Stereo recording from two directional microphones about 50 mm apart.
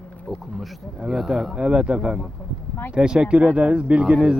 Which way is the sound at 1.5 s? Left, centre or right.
Right.